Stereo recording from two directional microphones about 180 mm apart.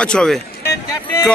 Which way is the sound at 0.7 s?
15° left (ahead or behind).